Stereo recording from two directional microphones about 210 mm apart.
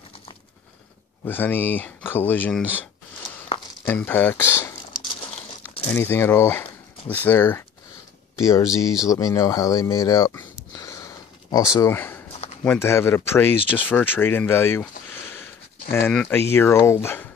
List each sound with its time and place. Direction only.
1.2 s speech: 10° left (ahead or behind)
3.8 s speech: 10° left (ahead or behind)
5.9 s speech: 10° left (ahead or behind)
8.6 s speech: 5° right (ahead or behind)
9.1 s speech: 15° left (ahead or behind)
10.7 s a sound: 15° left (ahead or behind)
12.6 s speech: 10° left (ahead or behind)